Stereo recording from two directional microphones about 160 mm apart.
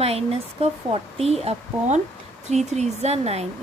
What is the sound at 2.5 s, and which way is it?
Speech, 45° right (ahead or behind).